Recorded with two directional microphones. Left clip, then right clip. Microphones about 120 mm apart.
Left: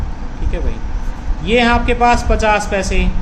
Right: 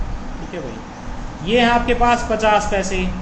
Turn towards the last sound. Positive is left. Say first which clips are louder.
# left 1 dB
turn(degrees=50)  # may be behind; listen again after turning